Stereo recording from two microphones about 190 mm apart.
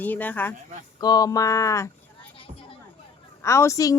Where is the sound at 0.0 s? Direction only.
10° left (ahead or behind).